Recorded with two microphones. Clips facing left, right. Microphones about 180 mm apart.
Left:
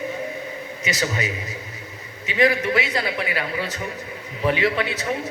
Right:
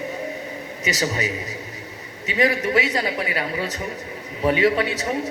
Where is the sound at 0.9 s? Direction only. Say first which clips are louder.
Right 1 dB; 40° right (ahead or behind).